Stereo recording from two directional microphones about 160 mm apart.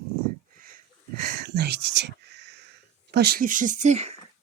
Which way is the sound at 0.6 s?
65° right (ahead or behind).